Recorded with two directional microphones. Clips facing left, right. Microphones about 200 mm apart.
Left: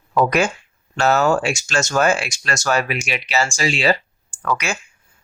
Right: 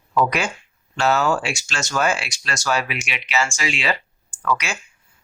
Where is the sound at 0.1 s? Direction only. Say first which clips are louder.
Left 4 dB; 45° left (ahead or behind).